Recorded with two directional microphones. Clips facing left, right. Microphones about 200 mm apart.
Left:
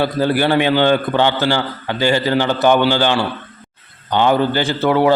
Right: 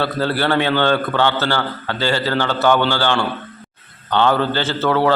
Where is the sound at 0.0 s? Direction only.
15° left (ahead or behind).